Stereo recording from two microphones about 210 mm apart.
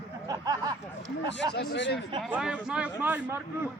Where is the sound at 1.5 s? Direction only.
55° left (ahead or behind).